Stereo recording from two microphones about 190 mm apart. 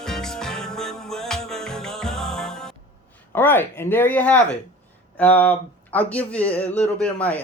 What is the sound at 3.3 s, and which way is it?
Speech, 10° left (ahead or behind).